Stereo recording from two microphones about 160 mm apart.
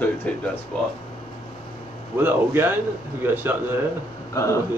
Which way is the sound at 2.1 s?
15° right (ahead or behind).